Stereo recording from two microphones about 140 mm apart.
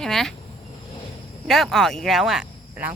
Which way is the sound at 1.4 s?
Centre (ahead or behind).